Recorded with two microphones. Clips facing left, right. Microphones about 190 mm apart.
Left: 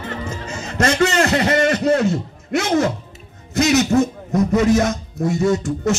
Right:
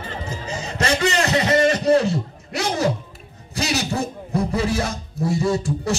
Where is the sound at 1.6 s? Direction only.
35° right (ahead or behind).